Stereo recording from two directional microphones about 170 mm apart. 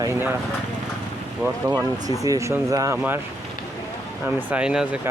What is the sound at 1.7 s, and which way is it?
Speech, 25° right (ahead or behind).